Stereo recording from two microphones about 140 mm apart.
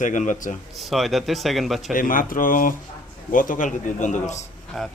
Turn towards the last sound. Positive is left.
turn(degrees=0)  # may be behind; listen again after turning